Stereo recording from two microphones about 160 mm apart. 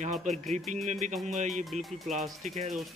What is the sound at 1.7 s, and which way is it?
Speech, 45° right (ahead or behind).